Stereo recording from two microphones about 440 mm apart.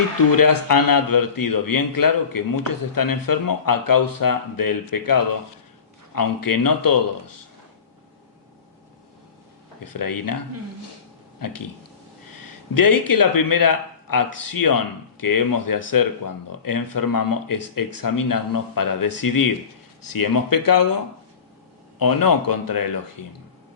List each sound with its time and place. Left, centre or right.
0.3 s a man's voice: left
9.8 s a man's voice: left
11.3 s speech: left
12.7 s a man's voice: left
21.9 s a man's voice: left